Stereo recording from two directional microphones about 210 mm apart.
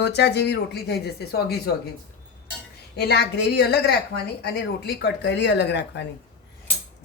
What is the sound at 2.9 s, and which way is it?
Speech, 50° left (ahead or behind).